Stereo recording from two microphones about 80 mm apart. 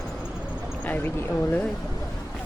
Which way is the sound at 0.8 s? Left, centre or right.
Left.